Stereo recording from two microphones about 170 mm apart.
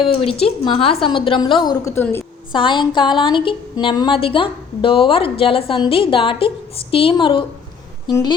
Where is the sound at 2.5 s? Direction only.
30° left (ahead or behind).